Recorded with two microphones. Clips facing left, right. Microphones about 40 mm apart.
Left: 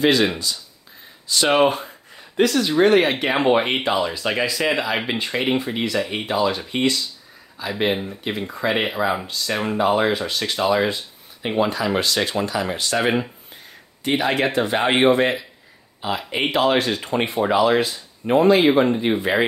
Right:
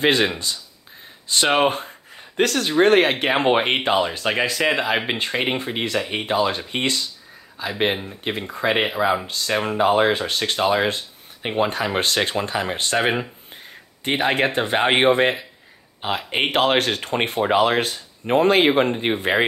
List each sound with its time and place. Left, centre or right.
0.0 s speech: right
2.3 s speech: right